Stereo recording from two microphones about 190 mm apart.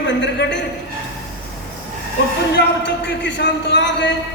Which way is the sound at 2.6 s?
65° left (ahead or behind).